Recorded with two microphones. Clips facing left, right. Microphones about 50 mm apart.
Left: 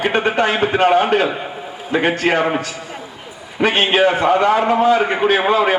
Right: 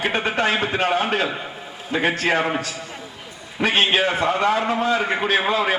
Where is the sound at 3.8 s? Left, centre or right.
Centre.